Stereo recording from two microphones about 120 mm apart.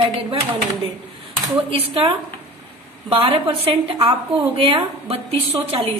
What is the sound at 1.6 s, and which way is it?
A woman's voice, 50° right (ahead or behind).